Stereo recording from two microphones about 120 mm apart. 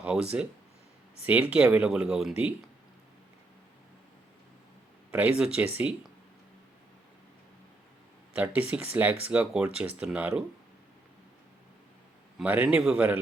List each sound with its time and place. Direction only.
0.0 s speech: 10° right (ahead or behind)
5.5 s speech: 10° right (ahead or behind)
8.4 s speech: 10° right (ahead or behind)
12.4 s speech: 10° right (ahead or behind)